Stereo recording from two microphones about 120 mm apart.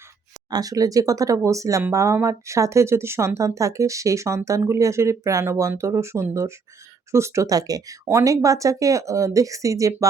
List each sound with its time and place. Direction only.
0.5 s speech: 30° right (ahead or behind)